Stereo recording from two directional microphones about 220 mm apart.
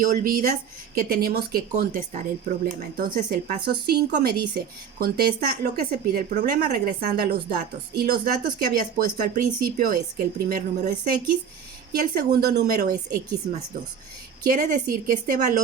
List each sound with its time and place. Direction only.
0.0 s speech: 40° right (ahead or behind)